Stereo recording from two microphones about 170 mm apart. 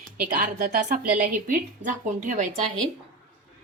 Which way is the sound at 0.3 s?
50° right (ahead or behind).